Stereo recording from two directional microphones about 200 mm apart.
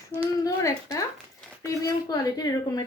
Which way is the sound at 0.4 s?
15° left (ahead or behind).